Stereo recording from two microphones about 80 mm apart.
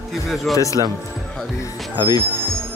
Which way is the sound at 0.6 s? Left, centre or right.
Left.